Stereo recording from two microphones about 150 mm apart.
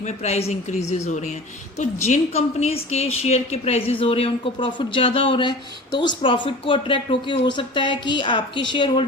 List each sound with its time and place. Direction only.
0.0 s a woman's voice: 50° left (ahead or behind); by 9.0 s 30° left (ahead or behind)